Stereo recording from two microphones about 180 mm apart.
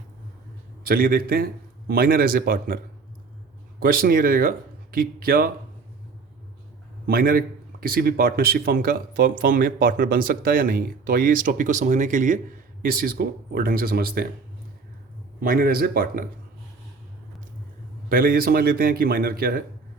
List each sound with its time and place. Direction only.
0.9 s speech: 55° right (ahead or behind)
3.8 s speech: 55° right (ahead or behind)
7.1 s speech: 55° right (ahead or behind)
15.4 s speech: 50° right (ahead or behind)
18.1 s speech: 55° right (ahead or behind)